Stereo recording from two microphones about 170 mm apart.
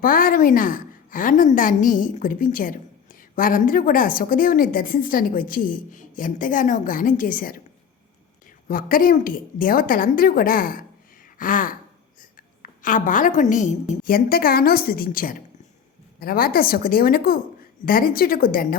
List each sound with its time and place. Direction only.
0.0 s a woman's voice: 55° left (ahead or behind)
8.6 s a woman's voice: 55° left (ahead or behind)
14.0 s a woman's voice: 60° left (ahead or behind)